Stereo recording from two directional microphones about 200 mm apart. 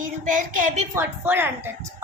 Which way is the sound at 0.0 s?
40° right (ahead or behind).